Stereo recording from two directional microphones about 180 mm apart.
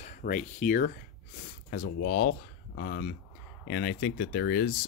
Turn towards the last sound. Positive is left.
turn(degrees=55)  # may be behind; listen again after turning